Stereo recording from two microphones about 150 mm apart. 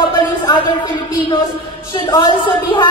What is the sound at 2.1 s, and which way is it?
Speech, 30° left (ahead or behind).